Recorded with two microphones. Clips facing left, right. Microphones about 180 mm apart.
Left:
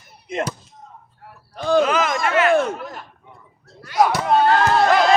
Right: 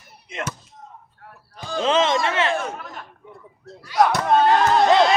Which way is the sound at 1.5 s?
70° left (ahead or behind).